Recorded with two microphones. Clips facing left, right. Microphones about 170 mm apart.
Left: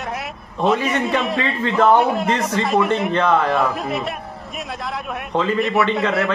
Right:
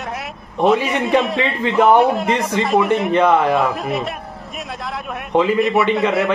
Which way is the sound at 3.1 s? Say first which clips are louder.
Right 4 dB; 25° right (ahead or behind).